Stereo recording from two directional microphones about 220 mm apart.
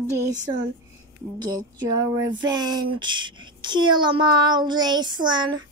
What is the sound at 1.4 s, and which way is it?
Speech, 20° right (ahead or behind).